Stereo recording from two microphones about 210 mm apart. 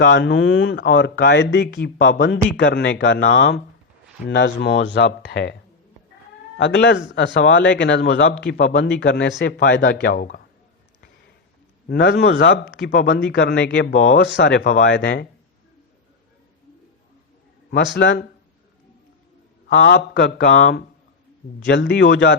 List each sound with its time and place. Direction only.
0.0 s speech: 55° left (ahead or behind)
6.6 s speech: 60° left (ahead or behind)
11.9 s speech: 50° left (ahead or behind)
17.7 s speech: 55° left (ahead or behind)
19.6 s speech: 55° left (ahead or behind)